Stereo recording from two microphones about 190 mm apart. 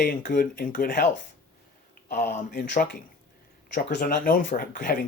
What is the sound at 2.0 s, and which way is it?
Speech, 55° left (ahead or behind).